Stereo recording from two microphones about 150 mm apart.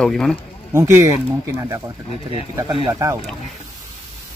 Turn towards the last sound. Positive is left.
turn(degrees=-20)  # may be behind; listen again after turning